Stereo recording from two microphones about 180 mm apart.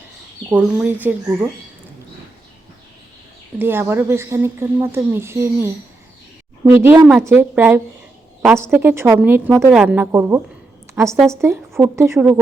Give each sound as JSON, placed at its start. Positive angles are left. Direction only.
{"t": 0.5, "sound": "a woman's voice", "side_deg": -10}
{"t": 3.6, "sound": "a woman's voice", "side_deg": -10}